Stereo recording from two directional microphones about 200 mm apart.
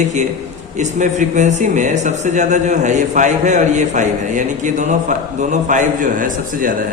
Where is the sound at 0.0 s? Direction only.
35° right (ahead or behind).